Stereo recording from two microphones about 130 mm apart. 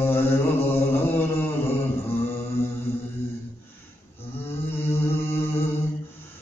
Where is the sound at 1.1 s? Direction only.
15° left (ahead or behind).